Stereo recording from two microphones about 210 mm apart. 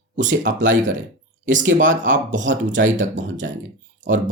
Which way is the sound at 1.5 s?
60° right (ahead or behind).